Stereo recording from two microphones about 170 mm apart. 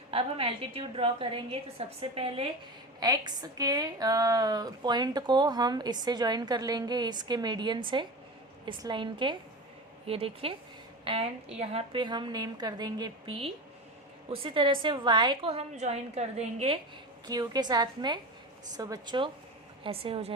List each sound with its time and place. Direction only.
0.1 s a woman's voice: 35° right (ahead or behind)
3.0 s a woman's voice: 25° right (ahead or behind)
17.2 s a woman's voice: 25° right (ahead or behind)